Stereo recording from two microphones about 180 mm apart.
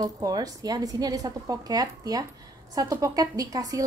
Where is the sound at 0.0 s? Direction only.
20° right (ahead or behind).